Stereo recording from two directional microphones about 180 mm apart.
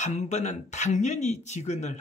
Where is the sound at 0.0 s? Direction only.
40° left (ahead or behind).